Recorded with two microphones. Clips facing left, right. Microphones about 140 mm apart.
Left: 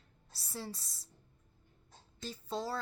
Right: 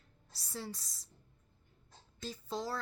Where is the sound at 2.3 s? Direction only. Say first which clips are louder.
Left 1 dB; 30° left (ahead or behind).